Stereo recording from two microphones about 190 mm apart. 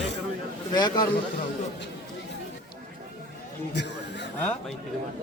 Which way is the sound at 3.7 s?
65° left (ahead or behind).